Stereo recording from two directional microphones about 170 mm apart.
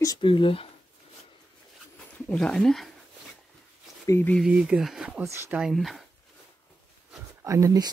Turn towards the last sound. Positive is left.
turn(degrees=-20)  # may be behind; listen again after turning